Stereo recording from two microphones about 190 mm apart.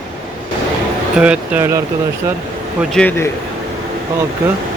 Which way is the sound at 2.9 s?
10° left (ahead or behind).